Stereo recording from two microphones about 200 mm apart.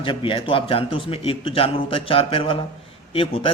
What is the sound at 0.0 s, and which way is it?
A man's voice, 25° left (ahead or behind).